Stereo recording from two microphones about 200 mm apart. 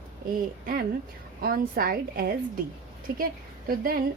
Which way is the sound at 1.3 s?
50° right (ahead or behind).